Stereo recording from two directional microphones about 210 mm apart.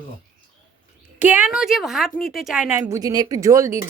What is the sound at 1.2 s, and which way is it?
A woman's voice, 10° right (ahead or behind).